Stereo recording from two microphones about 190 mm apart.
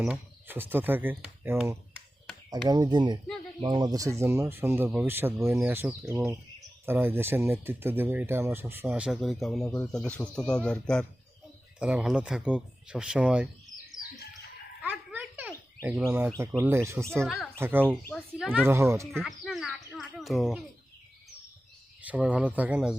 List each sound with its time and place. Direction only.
0.0 s speech: 10° right (ahead or behind)
11.8 s speech: 5° right (ahead or behind)
14.8 s bird: 10° right (ahead or behind)
17.6 s speech: 10° right (ahead or behind)
17.9 s speech: centre (ahead or behind)
18.5 s speech: 10° right (ahead or behind)
19.1 s bird: centre (ahead or behind)
22.0 s speech: 5° right (ahead or behind)